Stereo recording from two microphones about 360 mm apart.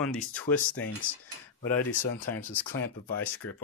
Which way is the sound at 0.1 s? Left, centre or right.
Centre.